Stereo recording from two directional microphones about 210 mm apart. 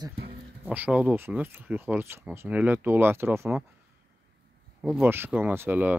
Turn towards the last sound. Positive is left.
turn(degrees=-10)  # may be behind; listen again after turning